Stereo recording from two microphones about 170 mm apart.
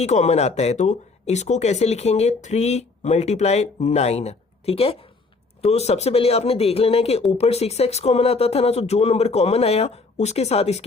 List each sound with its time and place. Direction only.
0.0 s speech: 40° left (ahead or behind)